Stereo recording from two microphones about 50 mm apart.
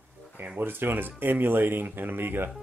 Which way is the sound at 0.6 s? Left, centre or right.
Right.